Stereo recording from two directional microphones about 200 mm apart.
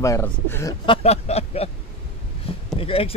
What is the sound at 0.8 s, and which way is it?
Speech, 30° left (ahead or behind).